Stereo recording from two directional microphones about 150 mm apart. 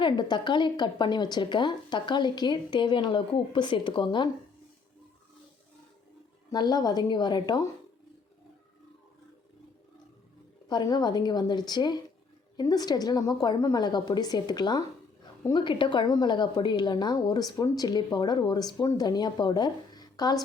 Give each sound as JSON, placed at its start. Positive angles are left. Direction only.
{"t": 0.0, "sound": "a woman's voice", "side_deg": 30}
{"t": 6.5, "sound": "a woman's voice", "side_deg": 30}
{"t": 10.7, "sound": "a woman's voice", "side_deg": 30}